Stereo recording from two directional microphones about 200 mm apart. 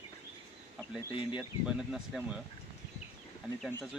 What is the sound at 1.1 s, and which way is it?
Speech, 25° left (ahead or behind).